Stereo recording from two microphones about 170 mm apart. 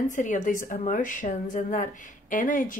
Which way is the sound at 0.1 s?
45° left (ahead or behind).